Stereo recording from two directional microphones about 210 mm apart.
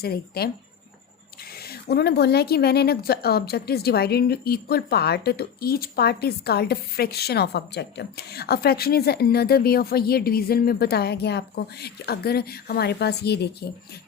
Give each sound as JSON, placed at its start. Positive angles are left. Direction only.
{"t": 0.0, "sound": "speech", "side_deg": 45}
{"t": 1.5, "sound": "speech", "side_deg": 45}